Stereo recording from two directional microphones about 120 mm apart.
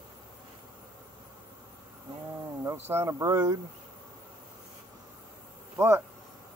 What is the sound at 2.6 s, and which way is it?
Speech, 20° right (ahead or behind).